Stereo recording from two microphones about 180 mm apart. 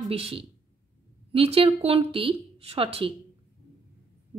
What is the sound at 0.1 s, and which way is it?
A woman's voice, 30° right (ahead or behind).